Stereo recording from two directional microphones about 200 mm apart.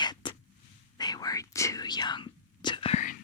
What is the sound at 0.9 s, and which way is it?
Whispering, 20° left (ahead or behind).